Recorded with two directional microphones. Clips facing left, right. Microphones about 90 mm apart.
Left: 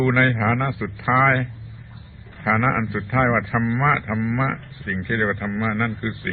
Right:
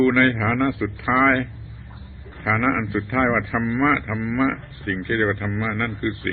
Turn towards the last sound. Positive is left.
turn(degrees=0)  # may be behind; listen again after turning